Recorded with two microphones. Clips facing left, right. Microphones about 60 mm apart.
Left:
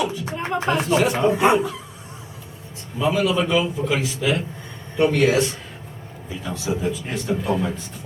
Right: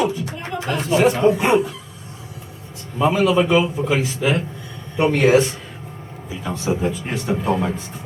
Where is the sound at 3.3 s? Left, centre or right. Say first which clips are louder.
Right 4 dB; centre.